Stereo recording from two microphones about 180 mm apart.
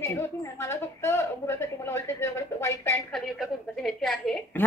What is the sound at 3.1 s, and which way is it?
A woman's voice, centre (ahead or behind).